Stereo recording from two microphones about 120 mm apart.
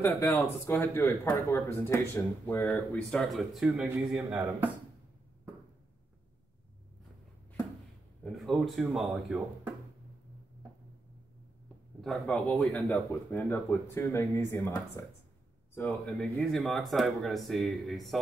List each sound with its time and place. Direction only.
0.0 s speech: 15° left (ahead or behind)
1.2 s speech: 30° left (ahead or behind)
1.7 s speech: 20° left (ahead or behind)
3.1 s speech: 5° left (ahead or behind); by 4.6 s 15° right (ahead or behind)
8.2 s a sound: centre (ahead or behind)
8.6 s speech: centre (ahead or behind)
12.0 s speech: centre (ahead or behind)
13.3 s speech: 20° left (ahead or behind)
15.9 s speech: centre (ahead or behind)